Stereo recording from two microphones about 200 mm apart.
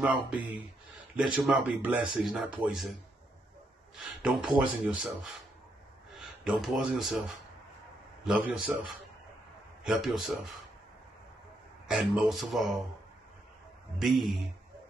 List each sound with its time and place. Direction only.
0.0 s speech: 5° right (ahead or behind)
4.0 s speech: centre (ahead or behind)
6.1 s speech: centre (ahead or behind)
11.9 s speech: centre (ahead or behind)
13.9 s speech: centre (ahead or behind)